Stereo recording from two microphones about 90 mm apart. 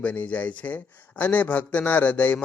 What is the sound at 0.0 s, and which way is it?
A man's voice, 15° left (ahead or behind).